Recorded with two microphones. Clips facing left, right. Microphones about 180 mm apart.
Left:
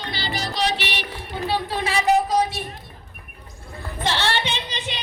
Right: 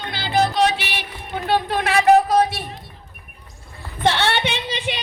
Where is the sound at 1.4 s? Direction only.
60° right (ahead or behind).